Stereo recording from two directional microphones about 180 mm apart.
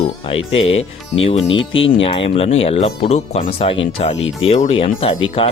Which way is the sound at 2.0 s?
30° left (ahead or behind).